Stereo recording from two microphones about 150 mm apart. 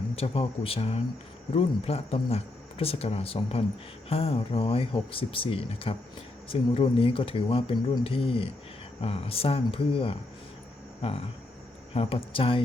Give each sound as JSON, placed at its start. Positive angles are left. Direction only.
{"t": 0.2, "sound": "speech", "side_deg": 40}